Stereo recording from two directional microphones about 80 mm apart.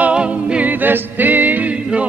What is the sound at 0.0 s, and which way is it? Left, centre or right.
Music, centre.